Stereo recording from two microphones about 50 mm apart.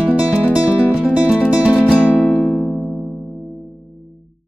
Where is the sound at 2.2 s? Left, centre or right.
Centre.